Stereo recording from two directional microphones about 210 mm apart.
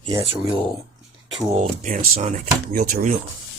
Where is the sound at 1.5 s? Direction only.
35° right (ahead or behind).